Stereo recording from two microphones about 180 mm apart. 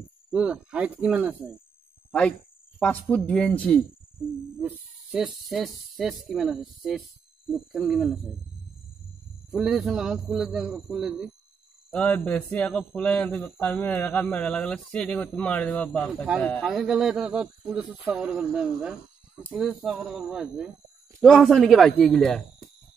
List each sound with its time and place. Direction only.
0.3 s speech: 5° right (ahead or behind)
2.0 s a sound: 5° left (ahead or behind)
2.8 s speech: 10° left (ahead or behind)
4.6 s speech: 5° right (ahead or behind)
9.5 s speech: centre (ahead or behind)